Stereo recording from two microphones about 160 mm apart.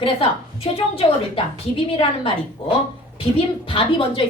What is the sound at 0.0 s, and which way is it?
A woman's voice, 35° left (ahead or behind).